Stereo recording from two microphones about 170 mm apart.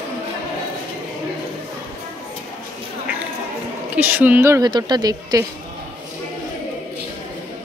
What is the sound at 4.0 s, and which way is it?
Speech, 10° right (ahead or behind).